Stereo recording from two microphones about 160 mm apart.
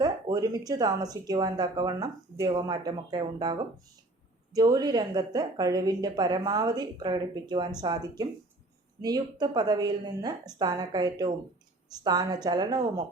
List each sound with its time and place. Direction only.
0.0 s a woman's voice: 25° right (ahead or behind)